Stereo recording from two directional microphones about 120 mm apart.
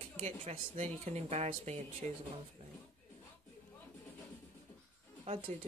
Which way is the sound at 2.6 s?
50° right (ahead or behind).